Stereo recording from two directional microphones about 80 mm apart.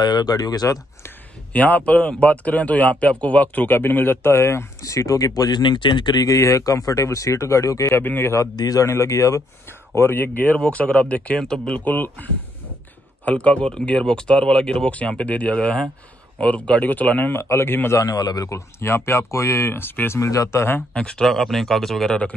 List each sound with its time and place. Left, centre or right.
0.0 s speech: left
1.5 s speech: centre; by 5.6 s left
5.6 s speech: left
6.1 s speech: left
8.0 s speech: left
8.4 s speech: left
9.7 s speech: left; by 11.8 s centre
11.8 s speech: left
17.9 s speech: left
18.8 s speech: left
20.2 s speech: left
20.9 s speech: centre